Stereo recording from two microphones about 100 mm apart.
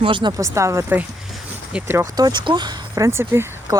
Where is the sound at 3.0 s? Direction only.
25° right (ahead or behind).